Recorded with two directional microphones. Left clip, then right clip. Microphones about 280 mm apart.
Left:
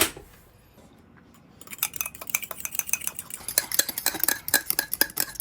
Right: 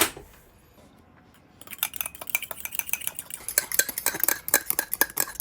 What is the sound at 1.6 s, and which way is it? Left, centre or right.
Dishes, centre.